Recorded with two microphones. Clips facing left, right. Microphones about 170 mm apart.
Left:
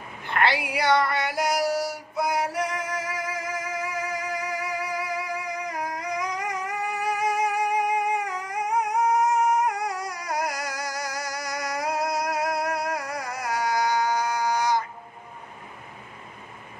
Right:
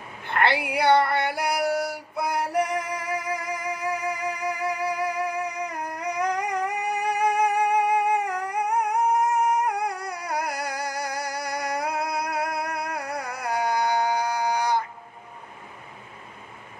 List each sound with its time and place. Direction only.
0.4 s female singing: 60° right (ahead or behind)
3.0 s music: 65° right (ahead or behind)
8.3 s a sound: 65° right (ahead or behind)